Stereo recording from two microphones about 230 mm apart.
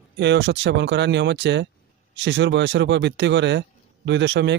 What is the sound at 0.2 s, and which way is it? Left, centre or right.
A man's voice, right.